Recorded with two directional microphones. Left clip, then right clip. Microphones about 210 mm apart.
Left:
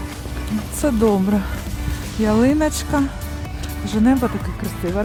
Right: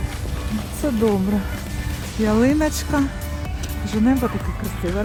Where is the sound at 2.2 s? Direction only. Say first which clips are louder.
Left 1 dB; 10° left (ahead or behind).